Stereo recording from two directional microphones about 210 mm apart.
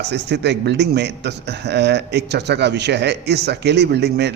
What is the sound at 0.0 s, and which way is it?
A man's voice, 55° right (ahead or behind).